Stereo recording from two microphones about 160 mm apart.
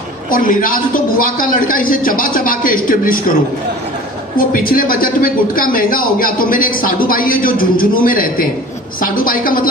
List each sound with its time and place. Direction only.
0.3 s speech: 60° left (ahead or behind)
4.4 s speech: 60° left (ahead or behind)